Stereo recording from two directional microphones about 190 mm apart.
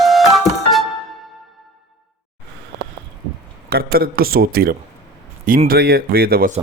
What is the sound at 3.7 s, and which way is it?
Speech, 50° right (ahead or behind).